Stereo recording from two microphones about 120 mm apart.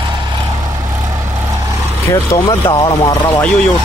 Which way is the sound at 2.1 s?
30° left (ahead or behind).